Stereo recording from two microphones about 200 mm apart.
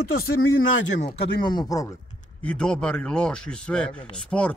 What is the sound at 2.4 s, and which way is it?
Speech, 5° left (ahead or behind).